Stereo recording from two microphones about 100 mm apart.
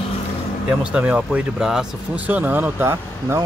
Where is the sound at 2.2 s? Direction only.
15° right (ahead or behind).